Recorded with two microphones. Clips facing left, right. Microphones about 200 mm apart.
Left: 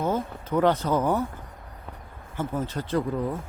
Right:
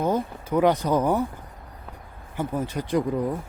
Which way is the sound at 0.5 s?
15° right (ahead or behind).